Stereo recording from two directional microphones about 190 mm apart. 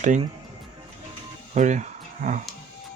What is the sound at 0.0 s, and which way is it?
Speech, 40° right (ahead or behind).